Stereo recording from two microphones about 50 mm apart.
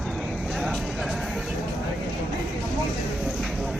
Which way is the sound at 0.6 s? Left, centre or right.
Centre.